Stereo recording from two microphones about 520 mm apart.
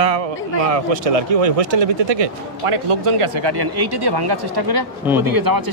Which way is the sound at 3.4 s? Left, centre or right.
Right.